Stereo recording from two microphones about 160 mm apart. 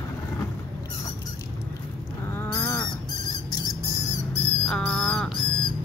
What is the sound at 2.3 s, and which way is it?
Goose, 15° left (ahead or behind).